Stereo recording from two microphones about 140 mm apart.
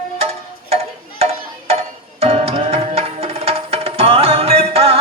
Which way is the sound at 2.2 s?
45° right (ahead or behind).